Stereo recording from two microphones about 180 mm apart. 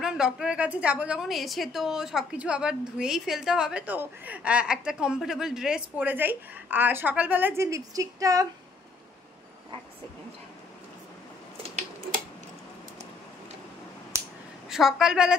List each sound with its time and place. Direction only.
0.0 s a woman's voice: 5° right (ahead or behind); by 8.5 s 20° right (ahead or behind)
11.5 s a sound: 35° right (ahead or behind)
14.7 s a woman's voice: centre (ahead or behind)